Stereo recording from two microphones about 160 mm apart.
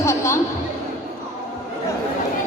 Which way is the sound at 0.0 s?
15° left (ahead or behind).